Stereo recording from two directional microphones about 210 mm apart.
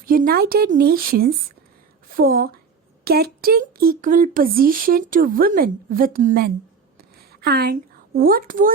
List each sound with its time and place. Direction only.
0.0 s a woman's voice: 45° right (ahead or behind)